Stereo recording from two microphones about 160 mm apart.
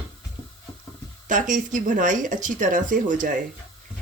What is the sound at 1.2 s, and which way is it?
Speech, 55° right (ahead or behind).